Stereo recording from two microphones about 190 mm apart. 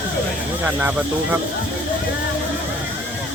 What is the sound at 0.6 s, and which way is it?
Speech, 10° right (ahead or behind).